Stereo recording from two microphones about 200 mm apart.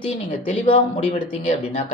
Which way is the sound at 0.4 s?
30° left (ahead or behind).